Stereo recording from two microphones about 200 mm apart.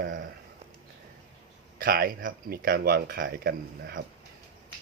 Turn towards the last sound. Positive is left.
turn(degrees=-50)  # may be behind; listen again after turning